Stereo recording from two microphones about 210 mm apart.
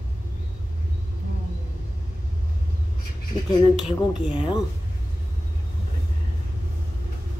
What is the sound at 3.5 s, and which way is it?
Speech, 25° left (ahead or behind).